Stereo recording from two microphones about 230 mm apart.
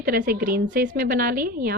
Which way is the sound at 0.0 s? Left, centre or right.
Right.